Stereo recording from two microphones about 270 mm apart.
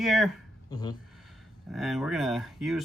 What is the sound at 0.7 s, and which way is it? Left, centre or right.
Speech, centre.